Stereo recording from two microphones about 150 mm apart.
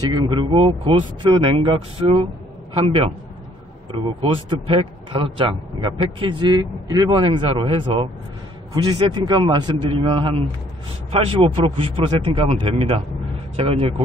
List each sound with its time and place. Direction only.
0.1 s a man's voice: 30° right (ahead or behind)
4.2 s a man's voice: 35° right (ahead or behind)